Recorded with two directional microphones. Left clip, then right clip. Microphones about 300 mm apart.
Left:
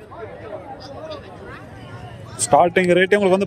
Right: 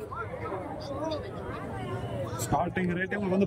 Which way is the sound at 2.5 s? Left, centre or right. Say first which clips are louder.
Left 16 dB; centre.